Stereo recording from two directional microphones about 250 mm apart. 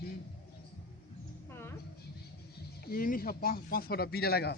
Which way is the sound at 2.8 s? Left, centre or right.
Left.